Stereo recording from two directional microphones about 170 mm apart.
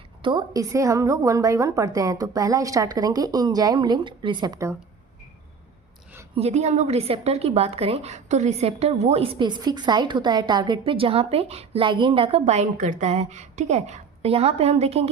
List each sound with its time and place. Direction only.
0.2 s a woman's voice: 25° right (ahead or behind)
6.3 s a woman's voice: 40° right (ahead or behind)